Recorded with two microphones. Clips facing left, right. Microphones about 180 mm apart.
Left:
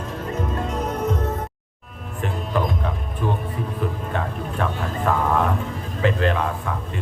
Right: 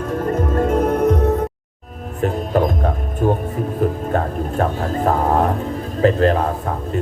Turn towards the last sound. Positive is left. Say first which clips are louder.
# right 6 dB
turn(degrees=-40)  # may be behind; listen again after turning